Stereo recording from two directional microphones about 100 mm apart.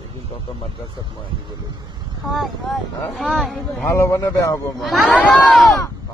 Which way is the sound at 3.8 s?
30° left (ahead or behind).